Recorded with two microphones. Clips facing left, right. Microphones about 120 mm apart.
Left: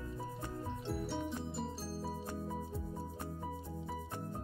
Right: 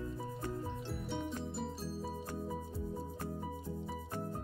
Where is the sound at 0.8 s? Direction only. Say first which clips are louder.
Left 2 dB; centre (ahead or behind).